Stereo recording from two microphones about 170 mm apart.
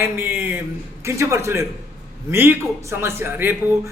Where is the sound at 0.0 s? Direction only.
10° right (ahead or behind).